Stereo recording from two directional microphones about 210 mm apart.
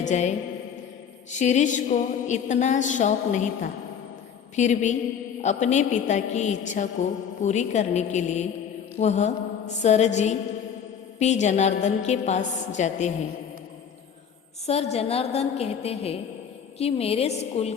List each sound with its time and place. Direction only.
0.0 s a woman's voice: 35° left (ahead or behind)
14.7 s a woman's voice: 30° left (ahead or behind)